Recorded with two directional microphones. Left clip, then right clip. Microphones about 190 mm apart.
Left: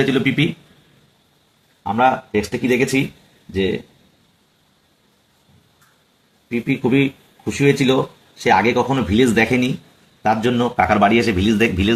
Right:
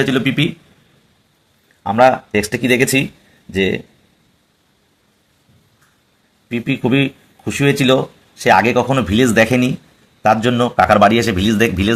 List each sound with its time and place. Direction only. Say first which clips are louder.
0.0 s a man's voice: right 1 dB; 40° right (ahead or behind)
1.8 s speech: right 5 dB; 60° right (ahead or behind)
6.5 s a man's voice: right 1 dB; 55° right (ahead or behind)